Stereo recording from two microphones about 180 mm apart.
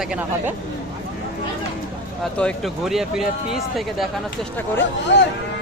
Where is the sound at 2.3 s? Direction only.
5° left (ahead or behind).